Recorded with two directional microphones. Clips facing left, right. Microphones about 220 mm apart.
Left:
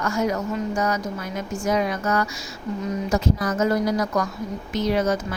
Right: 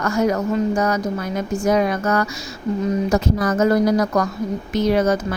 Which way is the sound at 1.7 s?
55° right (ahead or behind).